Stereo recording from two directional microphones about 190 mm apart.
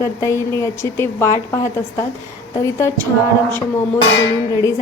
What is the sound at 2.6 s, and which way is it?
Speech, 15° left (ahead or behind).